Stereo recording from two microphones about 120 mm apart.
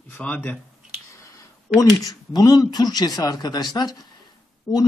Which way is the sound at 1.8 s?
30° left (ahead or behind).